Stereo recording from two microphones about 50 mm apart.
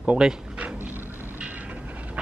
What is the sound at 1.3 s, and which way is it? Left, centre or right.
Train, right.